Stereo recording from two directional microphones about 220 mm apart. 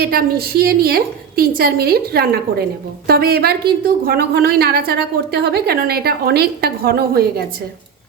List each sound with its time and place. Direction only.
0.0 s a woman's voice: 45° right (ahead or behind)